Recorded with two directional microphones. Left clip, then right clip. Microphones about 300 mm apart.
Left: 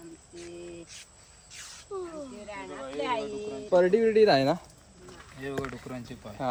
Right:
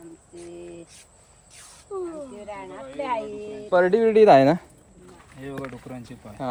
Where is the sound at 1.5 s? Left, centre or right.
Centre.